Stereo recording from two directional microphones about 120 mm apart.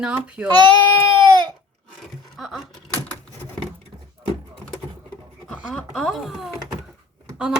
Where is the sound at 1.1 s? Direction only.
40° right (ahead or behind).